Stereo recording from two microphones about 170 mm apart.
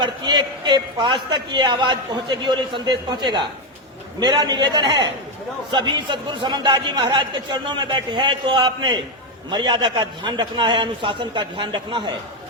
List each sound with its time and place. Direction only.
0.0 s a man's voice: 25° right (ahead or behind)